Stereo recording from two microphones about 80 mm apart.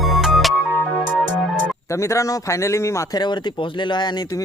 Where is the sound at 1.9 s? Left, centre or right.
Left.